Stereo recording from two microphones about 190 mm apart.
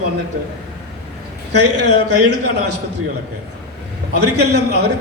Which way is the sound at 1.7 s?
65° right (ahead or behind).